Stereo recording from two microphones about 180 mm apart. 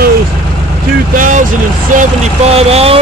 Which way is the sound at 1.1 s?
45° right (ahead or behind).